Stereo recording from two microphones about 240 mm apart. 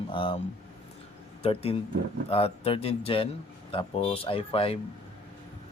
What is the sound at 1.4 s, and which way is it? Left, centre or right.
Speech, left.